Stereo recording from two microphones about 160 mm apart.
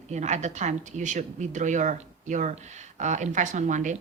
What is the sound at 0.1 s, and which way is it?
Speech, 45° right (ahead or behind).